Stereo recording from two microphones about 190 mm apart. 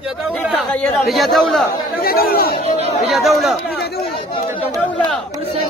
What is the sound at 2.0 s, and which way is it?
Speech, 50° left (ahead or behind).